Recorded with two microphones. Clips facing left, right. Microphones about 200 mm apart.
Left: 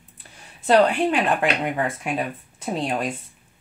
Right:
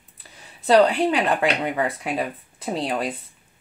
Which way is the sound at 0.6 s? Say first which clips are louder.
Right 1 dB; 35° right (ahead or behind).